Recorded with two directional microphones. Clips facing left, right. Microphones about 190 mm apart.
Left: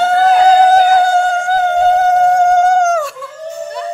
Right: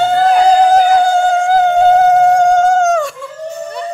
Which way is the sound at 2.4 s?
5° left (ahead or behind).